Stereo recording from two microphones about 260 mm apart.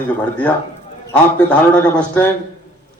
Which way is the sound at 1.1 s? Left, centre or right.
Centre.